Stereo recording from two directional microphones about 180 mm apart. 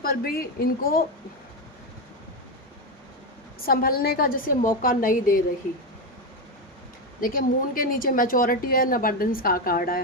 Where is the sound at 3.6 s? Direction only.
55° left (ahead or behind).